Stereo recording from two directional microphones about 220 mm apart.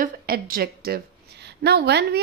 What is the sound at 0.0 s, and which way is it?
A woman's voice, 40° right (ahead or behind).